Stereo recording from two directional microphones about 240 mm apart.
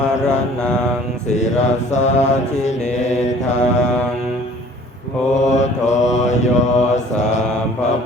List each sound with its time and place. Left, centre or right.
0.3 s mantra: centre
1.3 s mantra: left
5.3 s mantra: left